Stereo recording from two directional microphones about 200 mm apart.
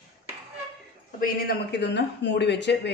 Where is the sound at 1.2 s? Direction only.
55° left (ahead or behind).